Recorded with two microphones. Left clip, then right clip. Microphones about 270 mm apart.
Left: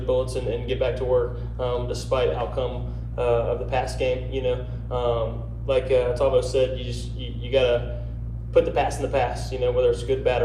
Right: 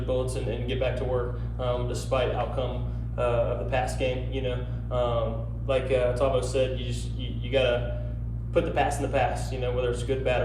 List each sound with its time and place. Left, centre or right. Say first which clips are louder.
0.7 s a man's voice: left 6 dB; left